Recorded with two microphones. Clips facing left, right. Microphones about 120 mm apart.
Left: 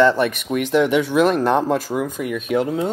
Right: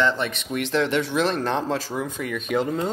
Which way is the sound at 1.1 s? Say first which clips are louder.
Left 7 dB; 55° left (ahead or behind).